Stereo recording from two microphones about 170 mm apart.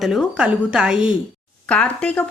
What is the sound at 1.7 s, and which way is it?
Speech, 5° left (ahead or behind).